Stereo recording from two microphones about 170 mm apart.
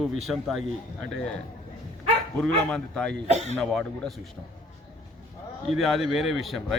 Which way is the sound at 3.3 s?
40° right (ahead or behind).